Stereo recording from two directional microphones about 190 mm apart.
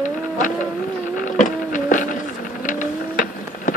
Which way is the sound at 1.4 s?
45° left (ahead or behind).